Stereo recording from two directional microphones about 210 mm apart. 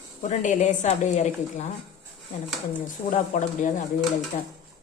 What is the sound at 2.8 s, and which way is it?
A woman's voice, 35° left (ahead or behind).